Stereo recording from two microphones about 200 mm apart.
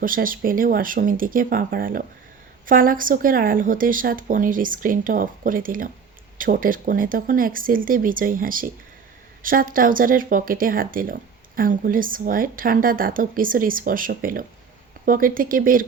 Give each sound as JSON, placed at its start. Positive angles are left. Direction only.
{"t": 0.0, "sound": "speech", "side_deg": -45}